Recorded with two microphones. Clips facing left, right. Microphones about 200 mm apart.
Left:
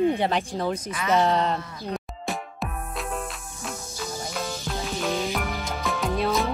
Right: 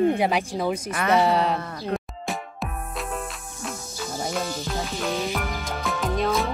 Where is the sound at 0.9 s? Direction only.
60° right (ahead or behind).